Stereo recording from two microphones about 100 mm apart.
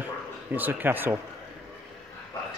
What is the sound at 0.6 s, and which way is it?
Speech, 20° right (ahead or behind).